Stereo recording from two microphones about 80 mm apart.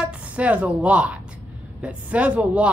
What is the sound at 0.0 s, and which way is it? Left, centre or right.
A woman's voice, centre.